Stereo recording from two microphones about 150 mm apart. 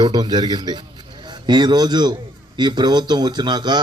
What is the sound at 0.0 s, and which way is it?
A man's voice, 30° right (ahead or behind).